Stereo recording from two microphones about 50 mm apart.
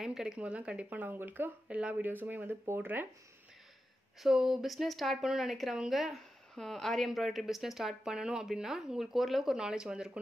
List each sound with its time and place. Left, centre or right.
0.0 s speech: centre
0.4 s speech: right
1.7 s speech: right
2.0 s speech: right
4.2 s a woman's voice: centre
6.5 s a woman's voice: centre
9.6 s speech: centre